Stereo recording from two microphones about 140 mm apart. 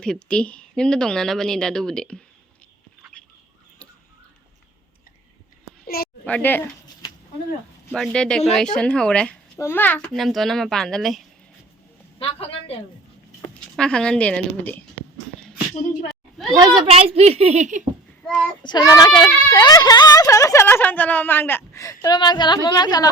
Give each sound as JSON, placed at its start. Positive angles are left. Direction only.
{"t": 0.0, "sound": "speech", "side_deg": 5}
{"t": 3.2, "sound": "bird", "side_deg": 5}
{"t": 5.8, "sound": "a sound", "side_deg": 90}
{"t": 6.2, "sound": "a woman's voice", "side_deg": 10}
{"t": 7.9, "sound": "speech", "side_deg": 5}
{"t": 9.6, "sound": "speech", "side_deg": 15}
{"t": 12.2, "sound": "a woman's voice", "side_deg": 45}
{"t": 13.5, "sound": "speech", "side_deg": 5}
{"t": 16.5, "sound": "a woman's voice", "side_deg": -30}
{"t": 16.8, "sound": "a woman's voice", "side_deg": -45}
{"t": 18.6, "sound": "speech", "side_deg": 30}